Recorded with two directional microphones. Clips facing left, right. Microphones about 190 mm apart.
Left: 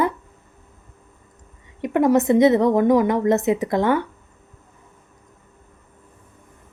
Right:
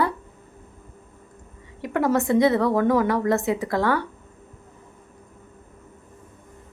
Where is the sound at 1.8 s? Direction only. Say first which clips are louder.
Left 5 dB; 20° left (ahead or behind).